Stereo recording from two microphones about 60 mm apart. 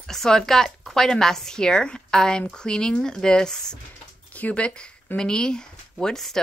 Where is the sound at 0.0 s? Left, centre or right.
Centre.